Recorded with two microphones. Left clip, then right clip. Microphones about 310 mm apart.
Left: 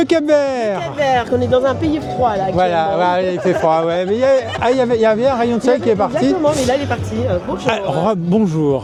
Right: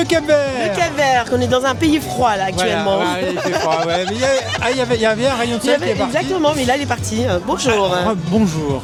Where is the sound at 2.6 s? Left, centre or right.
Left; by 5.7 s centre.